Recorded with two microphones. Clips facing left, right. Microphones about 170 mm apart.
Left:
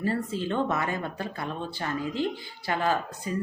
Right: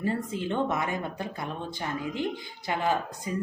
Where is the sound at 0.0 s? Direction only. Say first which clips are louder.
Left 1 dB; 20° right (ahead or behind).